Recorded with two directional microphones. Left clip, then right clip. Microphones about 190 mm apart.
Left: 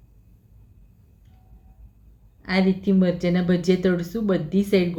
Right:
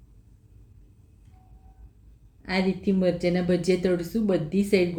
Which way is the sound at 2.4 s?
15° left (ahead or behind).